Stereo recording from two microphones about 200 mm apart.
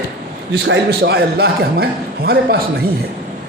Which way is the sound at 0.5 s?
55° right (ahead or behind).